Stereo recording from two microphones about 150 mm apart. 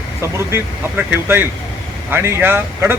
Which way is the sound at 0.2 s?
15° right (ahead or behind).